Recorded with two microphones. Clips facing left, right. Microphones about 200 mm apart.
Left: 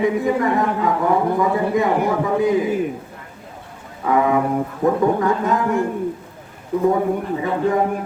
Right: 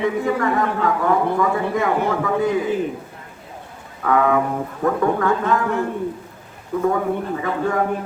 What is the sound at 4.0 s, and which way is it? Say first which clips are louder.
A man's voice: even; 20° left (ahead or behind).